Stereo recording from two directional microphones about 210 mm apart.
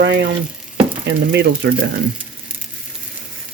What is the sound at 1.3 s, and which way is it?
Speech, 55° right (ahead or behind).